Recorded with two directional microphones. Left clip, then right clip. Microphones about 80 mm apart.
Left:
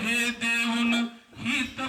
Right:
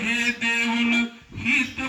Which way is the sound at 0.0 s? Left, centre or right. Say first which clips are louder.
Right 3 dB; left.